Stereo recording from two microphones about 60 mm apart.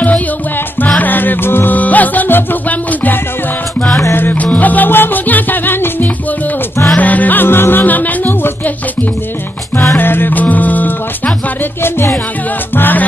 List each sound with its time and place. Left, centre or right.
0.8 s music: left
9.9 s music: left
11.8 s music: left
12.7 s music: left